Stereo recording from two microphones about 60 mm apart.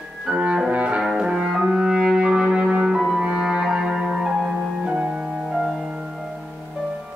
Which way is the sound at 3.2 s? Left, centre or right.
Centre.